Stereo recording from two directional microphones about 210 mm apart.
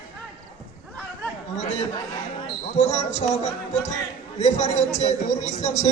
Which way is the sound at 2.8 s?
30° left (ahead or behind).